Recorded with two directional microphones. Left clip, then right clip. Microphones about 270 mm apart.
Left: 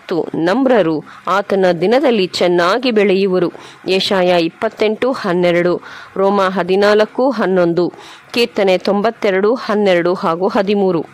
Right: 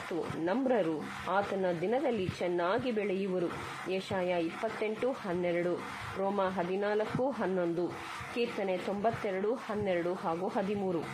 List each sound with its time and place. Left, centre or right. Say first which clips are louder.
0.1 s speech: left 19 dB; left